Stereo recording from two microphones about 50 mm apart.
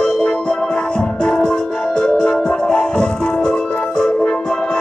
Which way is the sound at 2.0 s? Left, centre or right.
Left.